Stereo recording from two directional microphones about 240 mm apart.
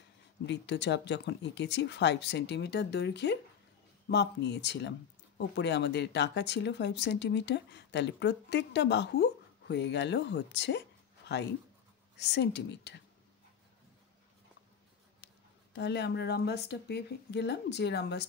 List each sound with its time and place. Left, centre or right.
0.5 s speech: left
15.7 s speech: left